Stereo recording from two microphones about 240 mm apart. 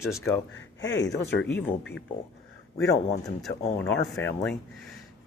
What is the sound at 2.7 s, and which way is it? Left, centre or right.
Speech, centre.